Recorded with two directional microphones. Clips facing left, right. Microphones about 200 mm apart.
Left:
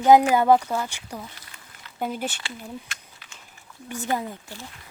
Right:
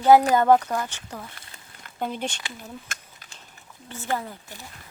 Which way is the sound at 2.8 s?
45° right (ahead or behind).